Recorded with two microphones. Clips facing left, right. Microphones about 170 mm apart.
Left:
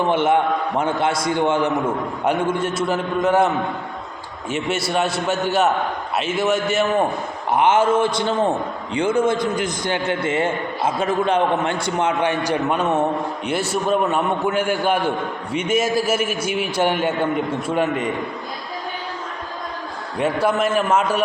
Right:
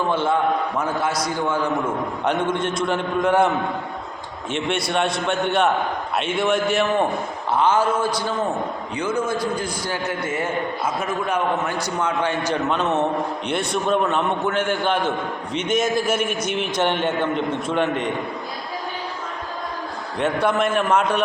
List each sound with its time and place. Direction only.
0.0 s a man's voice: 20° left (ahead or behind)
2.2 s a man's voice: 10° left (ahead or behind)
4.5 s a man's voice: 5° left (ahead or behind)
7.5 s a man's voice: 20° left (ahead or behind)
20.1 s a man's voice: 5° left (ahead or behind)